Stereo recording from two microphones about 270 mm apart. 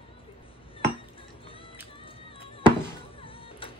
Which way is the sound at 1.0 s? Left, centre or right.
Centre.